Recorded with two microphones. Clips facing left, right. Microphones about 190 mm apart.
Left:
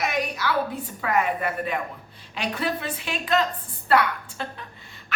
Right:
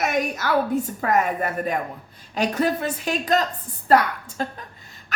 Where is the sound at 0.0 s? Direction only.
45° right (ahead or behind).